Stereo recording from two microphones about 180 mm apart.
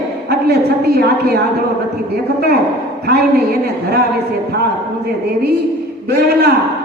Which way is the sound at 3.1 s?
65° right (ahead or behind).